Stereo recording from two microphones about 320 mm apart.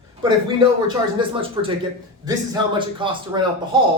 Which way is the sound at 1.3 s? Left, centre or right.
Centre.